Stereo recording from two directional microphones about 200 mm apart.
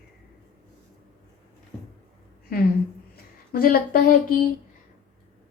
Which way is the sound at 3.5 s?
45° left (ahead or behind).